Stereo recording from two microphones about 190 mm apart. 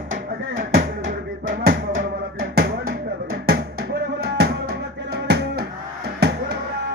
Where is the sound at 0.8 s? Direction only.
60° right (ahead or behind).